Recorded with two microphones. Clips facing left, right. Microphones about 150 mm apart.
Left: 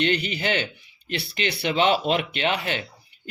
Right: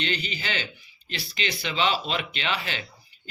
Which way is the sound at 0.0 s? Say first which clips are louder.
Left 7 dB; 60° left (ahead or behind).